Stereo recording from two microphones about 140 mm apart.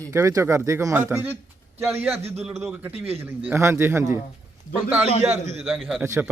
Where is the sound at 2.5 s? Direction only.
5° right (ahead or behind).